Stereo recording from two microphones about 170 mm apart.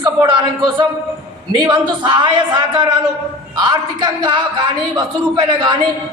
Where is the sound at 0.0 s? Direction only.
25° right (ahead or behind).